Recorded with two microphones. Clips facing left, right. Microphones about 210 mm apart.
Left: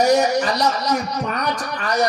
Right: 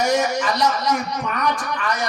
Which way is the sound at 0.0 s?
40° left (ahead or behind).